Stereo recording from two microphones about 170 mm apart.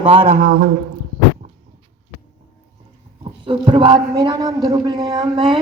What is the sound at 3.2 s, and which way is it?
A man's voice, 30° right (ahead or behind).